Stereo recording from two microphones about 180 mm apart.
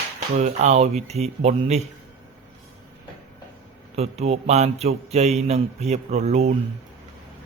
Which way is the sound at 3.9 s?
35° right (ahead or behind).